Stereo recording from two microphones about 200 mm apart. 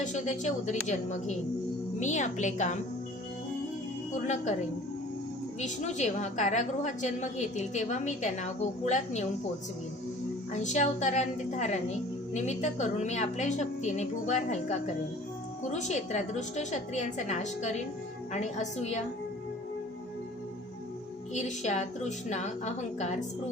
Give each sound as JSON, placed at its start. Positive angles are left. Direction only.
{"t": 0.0, "sound": "a woman's voice", "side_deg": 40}
{"t": 4.1, "sound": "a woman's voice", "side_deg": 35}
{"t": 5.5, "sound": "a woman's voice", "side_deg": 35}
{"t": 10.5, "sound": "a woman's voice", "side_deg": 35}
{"t": 21.3, "sound": "a woman's voice", "side_deg": 35}